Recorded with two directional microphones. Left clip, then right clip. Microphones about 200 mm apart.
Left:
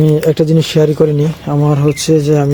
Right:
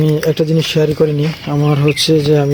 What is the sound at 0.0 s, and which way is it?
Speech, 10° left (ahead or behind).